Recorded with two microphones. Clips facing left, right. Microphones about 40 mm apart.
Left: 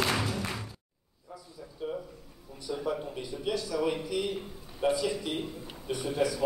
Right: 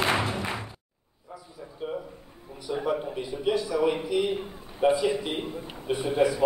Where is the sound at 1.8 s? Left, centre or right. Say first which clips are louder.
Right 2 dB; right.